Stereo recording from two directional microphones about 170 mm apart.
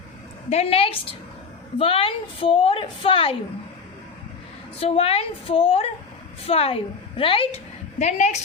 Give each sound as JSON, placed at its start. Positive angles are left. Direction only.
{"t": 0.5, "sound": "a woman's voice", "side_deg": 35}
{"t": 4.8, "sound": "a woman's voice", "side_deg": 35}